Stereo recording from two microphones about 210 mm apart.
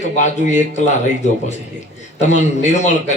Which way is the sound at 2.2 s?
35° left (ahead or behind).